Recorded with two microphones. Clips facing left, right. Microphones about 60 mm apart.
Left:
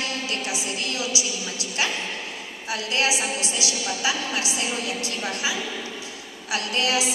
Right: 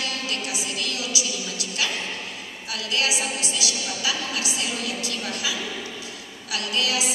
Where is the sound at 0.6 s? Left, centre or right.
Left.